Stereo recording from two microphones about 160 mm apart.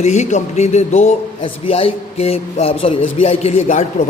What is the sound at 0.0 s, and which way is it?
A man's voice, 45° left (ahead or behind).